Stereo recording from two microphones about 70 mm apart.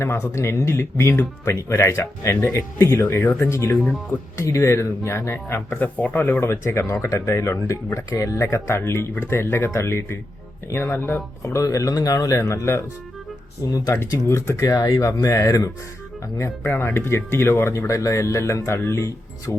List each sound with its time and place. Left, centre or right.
0.0 s speech: left
6.4 s speech: left
12.4 s speech: left
13.7 s speech: left
14.3 s speech: left
14.8 s speech: left
16.6 s speech: left